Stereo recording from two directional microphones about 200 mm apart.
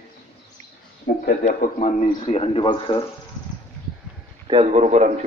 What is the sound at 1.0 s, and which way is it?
A man's voice, 45° left (ahead or behind).